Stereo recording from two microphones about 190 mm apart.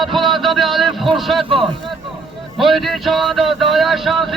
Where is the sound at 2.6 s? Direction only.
Centre (ahead or behind).